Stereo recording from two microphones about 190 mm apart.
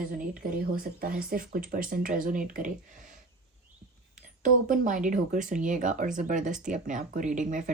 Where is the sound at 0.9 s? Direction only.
50° right (ahead or behind).